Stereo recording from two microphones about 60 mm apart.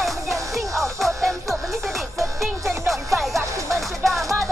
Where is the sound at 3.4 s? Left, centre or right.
Right.